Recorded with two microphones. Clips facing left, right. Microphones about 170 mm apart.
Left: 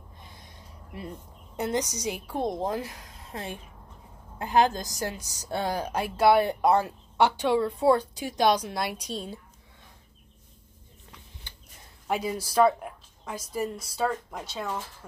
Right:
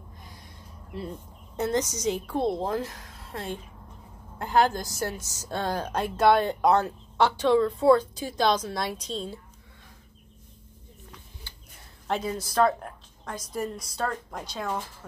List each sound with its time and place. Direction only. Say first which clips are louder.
1.6 s a woman's voice: right 2 dB; 15° left (ahead or behind)
11.5 s a sound: even; 20° left (ahead or behind)
12.1 s a woman's voice: even; 10° left (ahead or behind)